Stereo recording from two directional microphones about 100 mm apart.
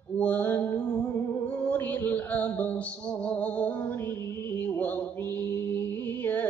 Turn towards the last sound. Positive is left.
turn(degrees=20)  # may be behind; listen again after turning